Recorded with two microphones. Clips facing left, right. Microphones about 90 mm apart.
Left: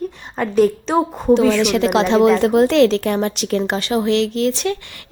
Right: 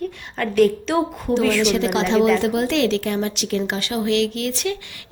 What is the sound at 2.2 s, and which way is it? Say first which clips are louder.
Speech: left 5 dB; 40° left (ahead or behind).